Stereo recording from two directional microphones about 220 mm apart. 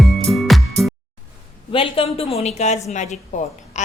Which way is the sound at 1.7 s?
25° left (ahead or behind).